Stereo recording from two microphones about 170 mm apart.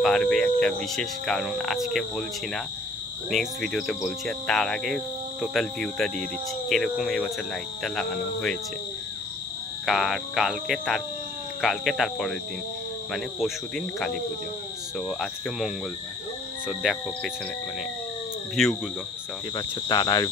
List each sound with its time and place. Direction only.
0.0 s speech: 5° left (ahead or behind)
9.8 s speech: centre (ahead or behind)
18.6 s speech: centre (ahead or behind)
19.5 s speech: 25° left (ahead or behind)